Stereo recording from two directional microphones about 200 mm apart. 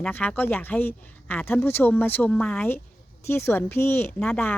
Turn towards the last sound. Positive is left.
turn(degrees=5)  # may be behind; listen again after turning